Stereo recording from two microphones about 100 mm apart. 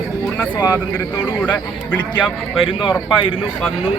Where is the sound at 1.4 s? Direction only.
15° left (ahead or behind).